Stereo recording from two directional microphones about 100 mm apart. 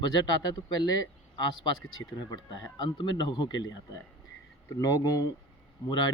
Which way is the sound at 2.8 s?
45° left (ahead or behind).